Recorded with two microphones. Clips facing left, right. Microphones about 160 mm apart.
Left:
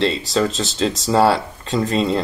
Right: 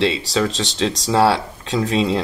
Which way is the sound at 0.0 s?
Centre (ahead or behind).